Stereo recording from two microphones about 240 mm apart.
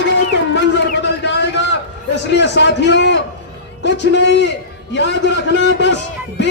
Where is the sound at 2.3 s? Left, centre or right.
Left.